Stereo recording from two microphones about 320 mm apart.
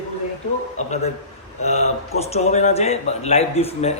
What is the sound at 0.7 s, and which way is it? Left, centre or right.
Speech, left.